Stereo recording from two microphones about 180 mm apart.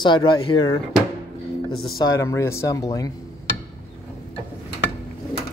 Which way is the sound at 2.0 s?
20° left (ahead or behind).